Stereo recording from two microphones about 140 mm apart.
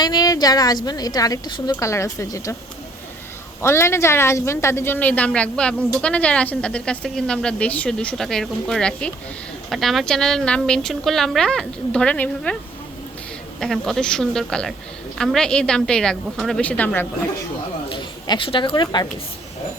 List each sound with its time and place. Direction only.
0.0 s a woman's voice: 30° left (ahead or behind)
1.8 s a woman's voice: 20° left (ahead or behind)
3.6 s a woman's voice: 20° left (ahead or behind)
13.6 s a woman's voice: centre (ahead or behind)
17.8 s speech: 35° left (ahead or behind)